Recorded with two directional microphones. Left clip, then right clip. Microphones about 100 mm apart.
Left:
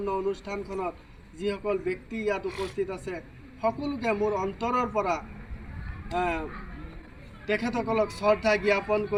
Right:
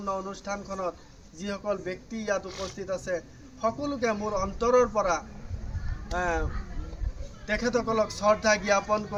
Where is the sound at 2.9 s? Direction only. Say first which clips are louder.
Right 5 dB; 40° right (ahead or behind).